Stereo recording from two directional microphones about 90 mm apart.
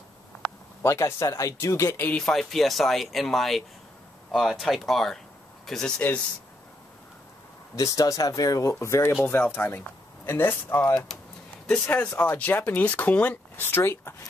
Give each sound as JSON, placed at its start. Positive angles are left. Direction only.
{"t": 0.8, "sound": "speech", "side_deg": 35}
{"t": 2.0, "sound": "speech", "side_deg": 20}
{"t": 2.2, "sound": "speech", "side_deg": 0}
{"t": 7.7, "sound": "speech", "side_deg": 40}
{"t": 8.7, "sound": "speech", "side_deg": 30}
{"t": 11.6, "sound": "speech", "side_deg": 10}